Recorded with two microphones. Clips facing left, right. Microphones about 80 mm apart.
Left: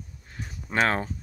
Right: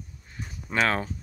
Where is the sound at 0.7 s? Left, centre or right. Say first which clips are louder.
Left 1 dB; left.